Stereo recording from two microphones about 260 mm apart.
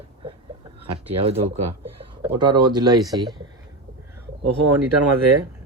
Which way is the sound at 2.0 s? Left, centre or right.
Centre.